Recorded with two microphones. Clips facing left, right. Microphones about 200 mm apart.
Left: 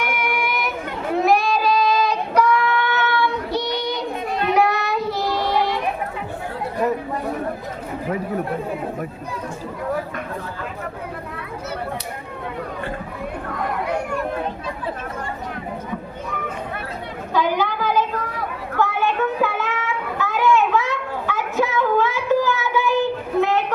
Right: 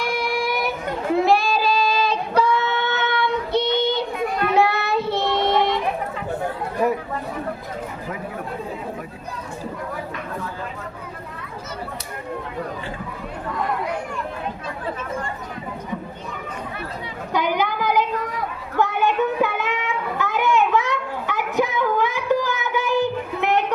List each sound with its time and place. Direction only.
0.0 s child singing: 30° right (ahead or behind)
17.3 s a sound: 15° right (ahead or behind)
18.8 s child singing: 20° right (ahead or behind)